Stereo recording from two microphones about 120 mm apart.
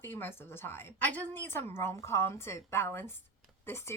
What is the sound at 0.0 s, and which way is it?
Speech, 20° left (ahead or behind).